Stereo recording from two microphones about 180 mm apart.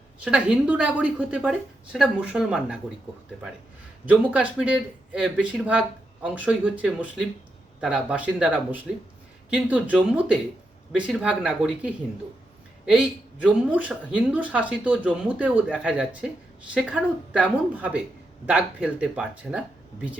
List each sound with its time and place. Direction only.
0.3 s speech: 5° right (ahead or behind)
4.0 s speech: 5° right (ahead or behind)